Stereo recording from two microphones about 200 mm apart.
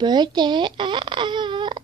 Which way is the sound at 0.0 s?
20° right (ahead or behind).